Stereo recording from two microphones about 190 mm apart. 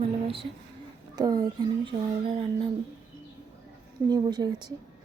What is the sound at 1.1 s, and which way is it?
A woman's voice, 20° right (ahead or behind).